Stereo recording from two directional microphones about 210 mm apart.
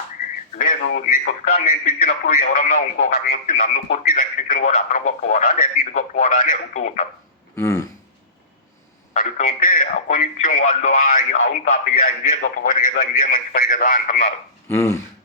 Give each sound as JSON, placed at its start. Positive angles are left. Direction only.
{"t": 0.5, "sound": "speech", "side_deg": 40}
{"t": 7.5, "sound": "a sound", "side_deg": 15}
{"t": 9.1, "sound": "speech", "side_deg": 40}
{"t": 14.7, "sound": "speech", "side_deg": 10}